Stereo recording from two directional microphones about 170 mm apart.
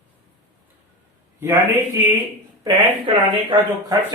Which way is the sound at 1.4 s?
15° right (ahead or behind).